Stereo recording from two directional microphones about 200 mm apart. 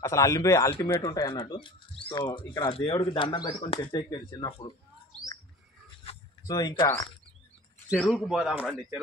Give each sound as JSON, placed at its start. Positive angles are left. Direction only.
{"t": 0.0, "sound": "speech", "side_deg": 15}
{"t": 6.0, "sound": "a sound", "side_deg": 20}
{"t": 7.9, "sound": "speech", "side_deg": -5}